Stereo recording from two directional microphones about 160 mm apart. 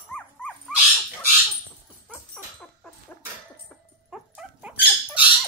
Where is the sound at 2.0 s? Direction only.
Centre (ahead or behind).